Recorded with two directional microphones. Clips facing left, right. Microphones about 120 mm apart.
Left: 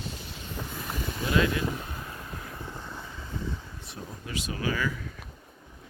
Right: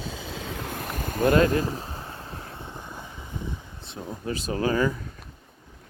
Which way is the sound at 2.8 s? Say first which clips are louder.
Right 1 dB; 15° right (ahead or behind).